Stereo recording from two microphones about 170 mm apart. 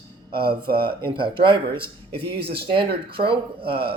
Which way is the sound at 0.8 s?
30° right (ahead or behind).